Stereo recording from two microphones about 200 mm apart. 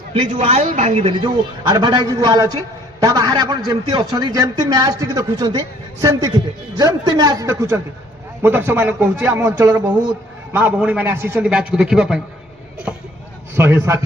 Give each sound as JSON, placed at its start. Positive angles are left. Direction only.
{"t": 0.1, "sound": "a man's voice", "side_deg": -30}
{"t": 13.6, "sound": "a man's voice", "side_deg": -10}